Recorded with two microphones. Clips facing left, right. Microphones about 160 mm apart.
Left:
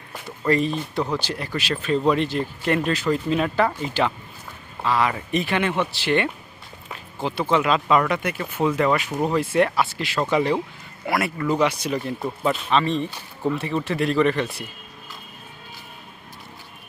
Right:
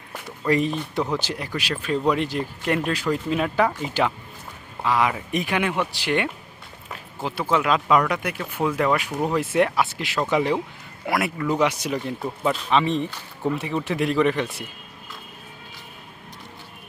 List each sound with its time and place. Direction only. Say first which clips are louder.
0.4 s speech: left 1 dB; 15° right (ahead or behind)
11.6 s speech: even; 15° right (ahead or behind)
12.4 s speech: even; centre (ahead or behind)
12.7 s speech: right 2 dB; 15° right (ahead or behind)